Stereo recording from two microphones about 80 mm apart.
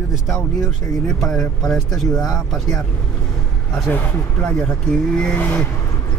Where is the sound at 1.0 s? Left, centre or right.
Centre.